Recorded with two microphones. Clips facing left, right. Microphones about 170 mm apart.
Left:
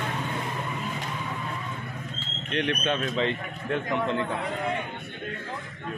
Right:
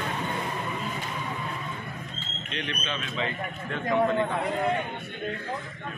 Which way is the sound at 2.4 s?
60° left (ahead or behind).